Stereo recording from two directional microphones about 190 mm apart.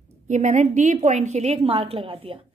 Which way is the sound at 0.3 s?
40° right (ahead or behind).